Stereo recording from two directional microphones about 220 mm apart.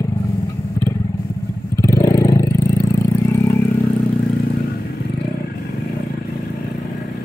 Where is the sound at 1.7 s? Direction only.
15° left (ahead or behind).